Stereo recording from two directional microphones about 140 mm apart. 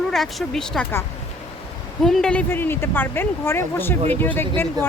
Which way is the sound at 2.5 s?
15° left (ahead or behind).